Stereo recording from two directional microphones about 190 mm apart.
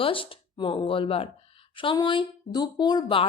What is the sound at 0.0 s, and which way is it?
A woman's voice, 30° left (ahead or behind).